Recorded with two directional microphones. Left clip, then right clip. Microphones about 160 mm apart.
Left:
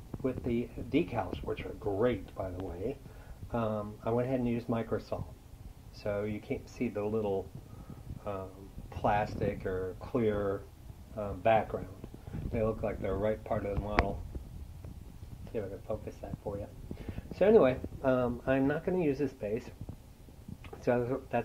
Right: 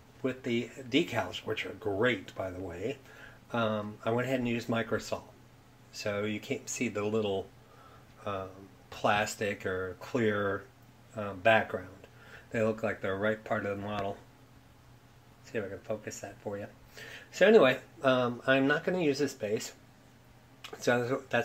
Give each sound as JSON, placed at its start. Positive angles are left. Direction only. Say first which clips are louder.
{"t": 0.2, "sound": "speech", "louder": "right 1 dB", "side_deg": -10}
{"t": 4.0, "sound": "speech", "louder": "even", "side_deg": -15}
{"t": 15.5, "sound": "speech", "louder": "right 2 dB", "side_deg": -15}
{"t": 17.3, "sound": "speech", "louder": "right 2 dB", "side_deg": -10}
{"t": 20.8, "sound": "speech", "louder": "right 2 dB", "side_deg": -10}